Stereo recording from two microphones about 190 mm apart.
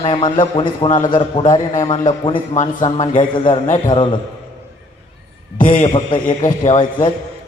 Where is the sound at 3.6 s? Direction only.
40° left (ahead or behind).